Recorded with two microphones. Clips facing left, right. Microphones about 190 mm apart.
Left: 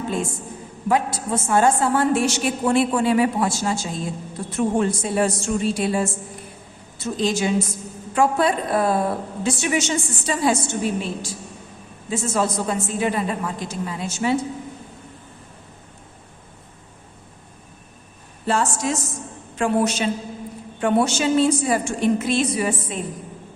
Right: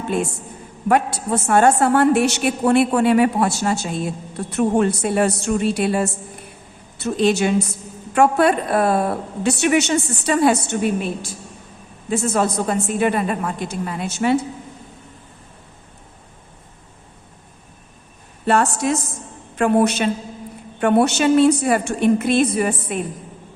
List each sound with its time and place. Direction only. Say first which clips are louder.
0.1 s a woman's voice: right 3 dB; 65° right (ahead or behind)
18.4 s a woman's voice: right 4 dB; 60° right (ahead or behind)